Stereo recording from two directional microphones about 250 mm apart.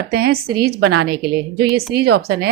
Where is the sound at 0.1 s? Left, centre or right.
Right.